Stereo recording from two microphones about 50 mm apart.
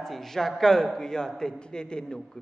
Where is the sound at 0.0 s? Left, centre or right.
Centre.